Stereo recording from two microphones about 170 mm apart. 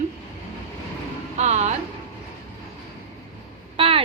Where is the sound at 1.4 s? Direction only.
40° right (ahead or behind).